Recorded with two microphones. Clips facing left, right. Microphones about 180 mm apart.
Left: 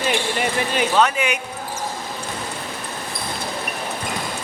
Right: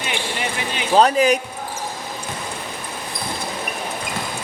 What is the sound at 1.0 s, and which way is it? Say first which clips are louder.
Speech: right 7 dB; 35° right (ahead or behind).